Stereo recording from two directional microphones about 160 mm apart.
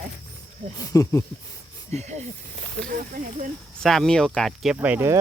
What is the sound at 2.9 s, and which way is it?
Speech, 55° right (ahead or behind).